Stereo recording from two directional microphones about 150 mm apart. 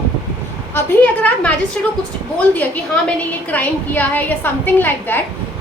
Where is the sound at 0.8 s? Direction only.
15° left (ahead or behind).